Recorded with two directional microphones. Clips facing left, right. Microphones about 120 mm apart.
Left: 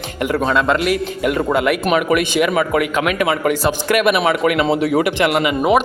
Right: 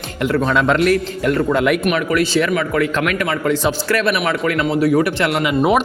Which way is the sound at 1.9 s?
20° left (ahead or behind).